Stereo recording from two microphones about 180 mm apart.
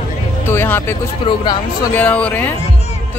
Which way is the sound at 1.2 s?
25° left (ahead or behind).